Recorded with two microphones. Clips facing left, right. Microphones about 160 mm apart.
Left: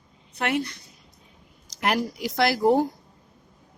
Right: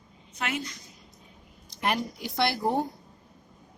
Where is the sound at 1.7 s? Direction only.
85° left.